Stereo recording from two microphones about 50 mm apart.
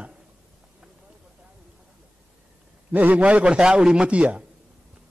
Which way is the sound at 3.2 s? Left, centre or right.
Right.